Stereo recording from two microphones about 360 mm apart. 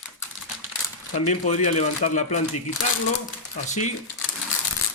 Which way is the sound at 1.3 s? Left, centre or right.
Centre.